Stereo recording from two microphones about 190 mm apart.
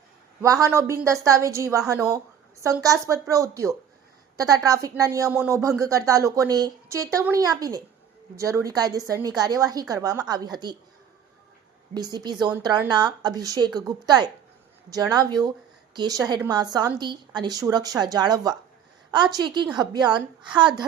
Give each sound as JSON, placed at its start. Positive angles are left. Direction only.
{"t": 0.4, "sound": "a woman's voice", "side_deg": -15}
{"t": 11.9, "sound": "a woman's voice", "side_deg": -20}